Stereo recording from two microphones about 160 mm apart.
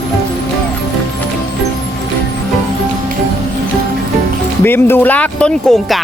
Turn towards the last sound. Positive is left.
turn(degrees=0)  # may be behind; listen again after turning